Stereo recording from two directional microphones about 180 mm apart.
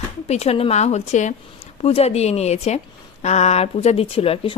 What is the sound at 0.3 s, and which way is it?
A woman's voice, 35° left (ahead or behind).